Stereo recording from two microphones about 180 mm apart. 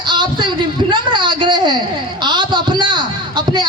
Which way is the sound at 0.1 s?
25° right (ahead or behind).